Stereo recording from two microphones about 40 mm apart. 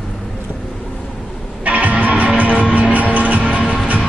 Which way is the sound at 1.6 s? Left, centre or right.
Right.